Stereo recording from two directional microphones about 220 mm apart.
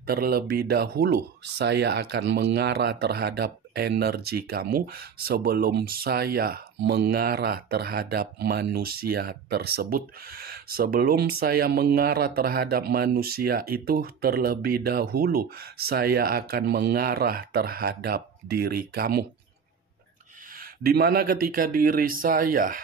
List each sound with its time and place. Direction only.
0.0 s speech: 45° right (ahead or behind)
20.5 s speech: 45° right (ahead or behind)